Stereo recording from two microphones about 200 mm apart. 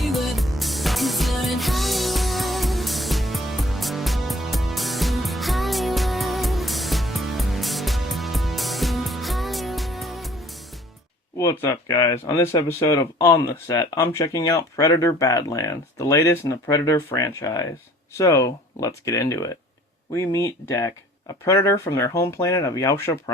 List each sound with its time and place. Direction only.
0.0 s music: centre (ahead or behind)
11.3 s speech: 15° left (ahead or behind)